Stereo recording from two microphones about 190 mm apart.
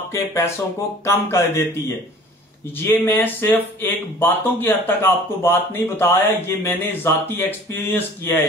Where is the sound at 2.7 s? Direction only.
10° left (ahead or behind).